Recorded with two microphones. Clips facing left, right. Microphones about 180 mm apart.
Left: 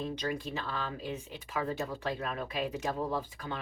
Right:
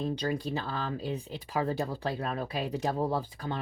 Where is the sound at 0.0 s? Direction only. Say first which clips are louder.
Right 4 dB; 35° right (ahead or behind).